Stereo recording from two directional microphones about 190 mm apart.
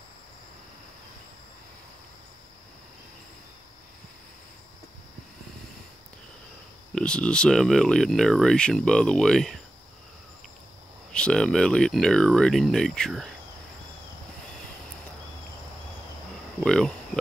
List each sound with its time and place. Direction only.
7.0 s speech: 5° left (ahead or behind)
11.1 s speech: 5° left (ahead or behind)
16.6 s speech: 5° left (ahead or behind)